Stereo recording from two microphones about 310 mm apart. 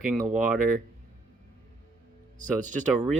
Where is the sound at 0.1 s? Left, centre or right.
Centre.